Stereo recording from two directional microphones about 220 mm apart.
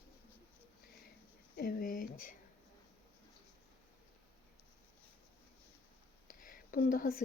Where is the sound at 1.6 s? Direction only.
40° left (ahead or behind).